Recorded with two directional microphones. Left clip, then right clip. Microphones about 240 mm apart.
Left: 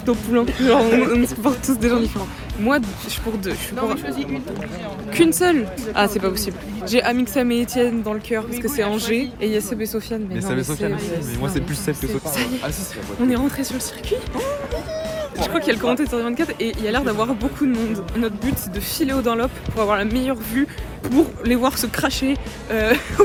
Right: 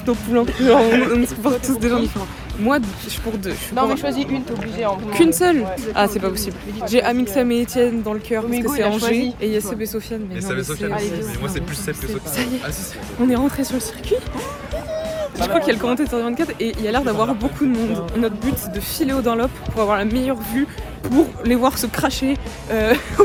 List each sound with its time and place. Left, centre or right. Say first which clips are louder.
0.0 s speech: right 1 dB; centre
5.1 s speech: even; centre
10.5 s speech: right 1 dB; left
13.2 s speech: right 2 dB; centre
15.1 s speech: right 4 dB; centre